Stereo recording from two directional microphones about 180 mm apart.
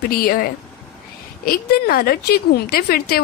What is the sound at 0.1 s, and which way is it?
A woman's voice, 55° left (ahead or behind).